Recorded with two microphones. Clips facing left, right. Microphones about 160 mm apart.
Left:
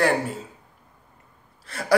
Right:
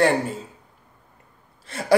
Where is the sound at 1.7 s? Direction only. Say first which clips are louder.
Right 3 dB; 25° right (ahead or behind).